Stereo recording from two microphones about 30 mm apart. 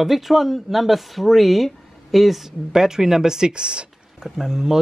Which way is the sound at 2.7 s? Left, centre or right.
Centre.